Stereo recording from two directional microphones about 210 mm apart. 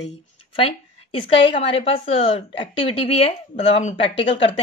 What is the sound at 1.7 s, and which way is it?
A woman's voice, 25° left (ahead or behind).